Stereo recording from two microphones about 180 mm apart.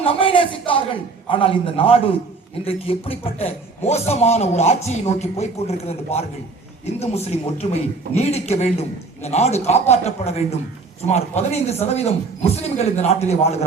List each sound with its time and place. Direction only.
0.0 s a man's voice: 30° left (ahead or behind)